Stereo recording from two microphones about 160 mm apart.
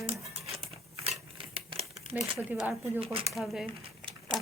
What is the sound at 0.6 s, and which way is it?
Scissors, 40° right (ahead or behind).